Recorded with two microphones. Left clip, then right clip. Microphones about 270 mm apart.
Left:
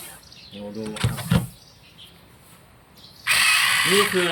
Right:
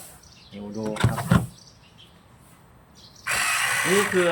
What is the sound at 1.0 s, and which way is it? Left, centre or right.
Wild animals, centre.